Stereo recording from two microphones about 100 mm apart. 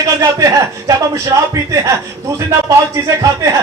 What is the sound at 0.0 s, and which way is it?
Speech, 35° right (ahead or behind).